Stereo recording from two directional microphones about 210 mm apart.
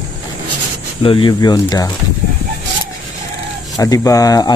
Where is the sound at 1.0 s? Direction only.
25° left (ahead or behind).